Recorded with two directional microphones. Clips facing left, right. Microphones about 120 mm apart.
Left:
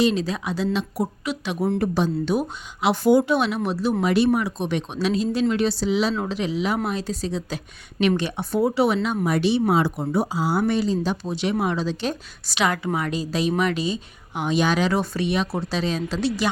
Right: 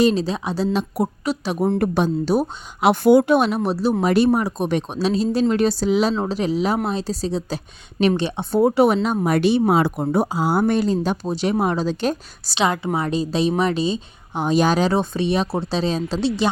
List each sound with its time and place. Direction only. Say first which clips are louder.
0.0 s speech: right 3 dB; 35° right (ahead or behind)
1.8 s speech: right 3 dB; 55° right (ahead or behind)
2.2 s speech: right 3 dB; 35° right (ahead or behind)
2.8 s speech: right 4 dB; 60° right (ahead or behind)
3.3 s speech: right 4 dB; 40° right (ahead or behind)
8.6 s speech: right 5 dB; 50° right (ahead or behind)
9.0 s speech: right 3 dB; 30° right (ahead or behind)
9.2 s speech: right 3 dB; 55° right (ahead or behind)
11.3 s speech: right 4 dB; 40° right (ahead or behind)
12.5 s a woman's voice: right 2 dB; 25° right (ahead or behind)